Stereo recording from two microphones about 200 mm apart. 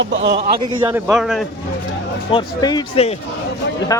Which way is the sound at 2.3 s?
20° left (ahead or behind).